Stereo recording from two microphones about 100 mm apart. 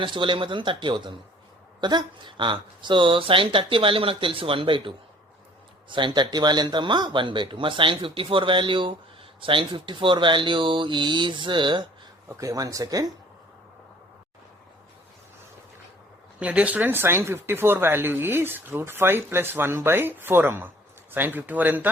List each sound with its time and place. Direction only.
0.0 s speech: 55° right (ahead or behind)
12.3 s speech: 35° right (ahead or behind)
16.4 s speech: 15° right (ahead or behind)